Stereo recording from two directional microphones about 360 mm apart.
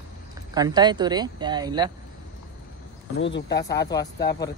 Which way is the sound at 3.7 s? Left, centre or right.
Centre.